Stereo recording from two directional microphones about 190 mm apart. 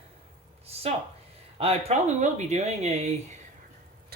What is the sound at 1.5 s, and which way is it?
Speech, 35° right (ahead or behind).